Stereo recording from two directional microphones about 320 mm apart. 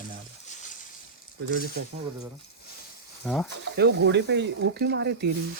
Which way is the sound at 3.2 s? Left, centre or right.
Centre.